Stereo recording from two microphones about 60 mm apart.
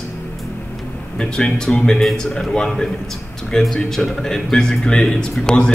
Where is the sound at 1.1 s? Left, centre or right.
Centre.